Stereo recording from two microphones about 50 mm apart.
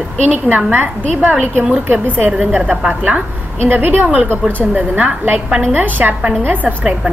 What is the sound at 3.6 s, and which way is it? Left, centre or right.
A woman's voice, right.